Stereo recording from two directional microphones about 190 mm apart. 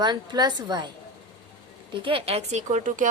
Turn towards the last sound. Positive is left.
turn(degrees=-40)  # may be behind; listen again after turning